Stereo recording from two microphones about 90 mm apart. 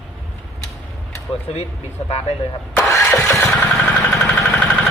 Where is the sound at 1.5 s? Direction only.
90° left.